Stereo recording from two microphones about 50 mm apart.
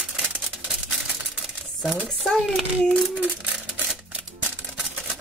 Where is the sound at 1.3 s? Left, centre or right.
Centre.